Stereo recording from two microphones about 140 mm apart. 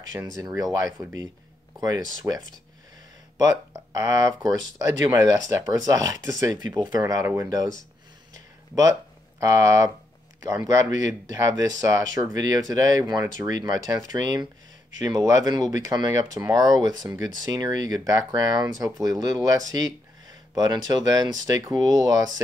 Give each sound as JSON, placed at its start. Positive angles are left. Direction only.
{"t": 0.2, "sound": "speech", "side_deg": -15}
{"t": 9.4, "sound": "speech", "side_deg": -20}